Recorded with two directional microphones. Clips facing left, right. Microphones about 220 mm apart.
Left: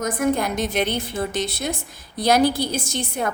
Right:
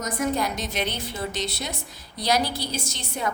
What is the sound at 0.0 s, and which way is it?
A woman's voice, 55° left (ahead or behind).